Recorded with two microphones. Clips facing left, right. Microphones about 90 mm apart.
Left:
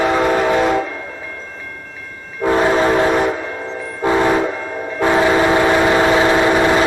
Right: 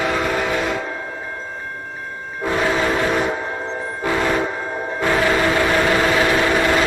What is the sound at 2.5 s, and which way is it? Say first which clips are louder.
Train horn: left 5 dB; 30° left (ahead or behind).